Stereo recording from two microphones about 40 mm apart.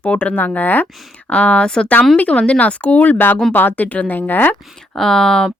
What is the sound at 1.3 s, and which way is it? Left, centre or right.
Speech, left.